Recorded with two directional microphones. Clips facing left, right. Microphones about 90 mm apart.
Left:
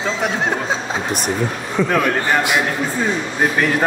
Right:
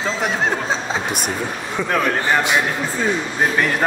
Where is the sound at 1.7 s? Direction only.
Centre (ahead or behind).